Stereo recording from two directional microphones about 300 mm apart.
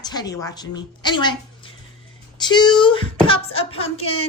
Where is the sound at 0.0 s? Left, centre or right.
Centre.